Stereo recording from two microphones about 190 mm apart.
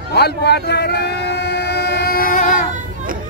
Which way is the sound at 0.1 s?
60° left (ahead or behind).